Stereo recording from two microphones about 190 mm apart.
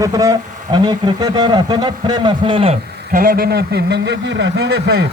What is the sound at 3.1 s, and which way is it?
Speech, 50° right (ahead or behind).